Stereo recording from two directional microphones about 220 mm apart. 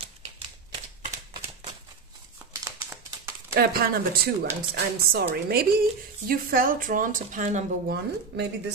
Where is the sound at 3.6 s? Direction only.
45° right (ahead or behind).